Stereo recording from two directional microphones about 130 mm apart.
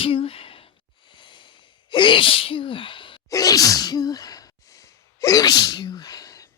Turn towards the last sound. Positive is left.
turn(degrees=25)  # may be behind; listen again after turning